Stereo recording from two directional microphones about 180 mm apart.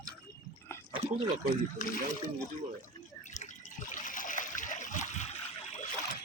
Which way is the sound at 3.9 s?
45° left (ahead or behind).